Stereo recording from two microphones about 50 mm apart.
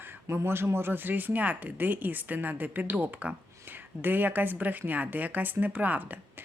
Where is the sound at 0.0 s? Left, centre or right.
Right.